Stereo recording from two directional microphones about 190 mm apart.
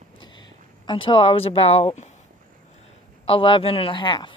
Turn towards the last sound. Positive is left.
turn(degrees=25)  # may be behind; listen again after turning